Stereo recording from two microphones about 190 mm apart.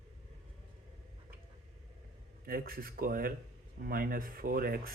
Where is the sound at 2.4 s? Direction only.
50° right (ahead or behind).